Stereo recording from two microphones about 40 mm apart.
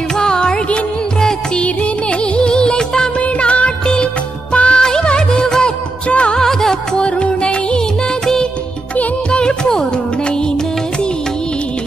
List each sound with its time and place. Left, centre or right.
0.2 s music: left
2.3 s music: left
3.2 s music: left
3.8 s music of bollywood: left
6.0 s music: left
6.3 s music: centre
7.0 s music: left
9.3 s music: left